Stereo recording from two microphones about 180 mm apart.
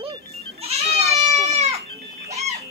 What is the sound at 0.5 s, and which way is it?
Goat, 35° right (ahead or behind).